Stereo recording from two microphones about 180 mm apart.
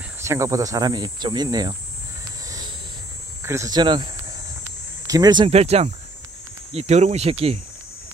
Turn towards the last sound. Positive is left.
turn(degrees=-35)  # may be behind; listen again after turning